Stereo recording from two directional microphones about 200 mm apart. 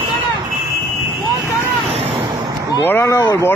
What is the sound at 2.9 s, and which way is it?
Speech, 10° left (ahead or behind).